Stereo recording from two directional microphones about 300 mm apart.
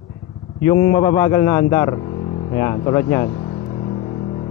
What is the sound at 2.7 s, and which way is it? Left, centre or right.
Vehicle, centre.